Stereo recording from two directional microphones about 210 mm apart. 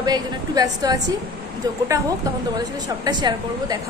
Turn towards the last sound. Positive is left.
turn(degrees=-20)  # may be behind; listen again after turning